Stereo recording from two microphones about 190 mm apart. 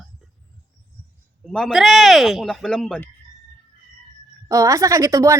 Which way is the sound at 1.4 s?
Centre (ahead or behind).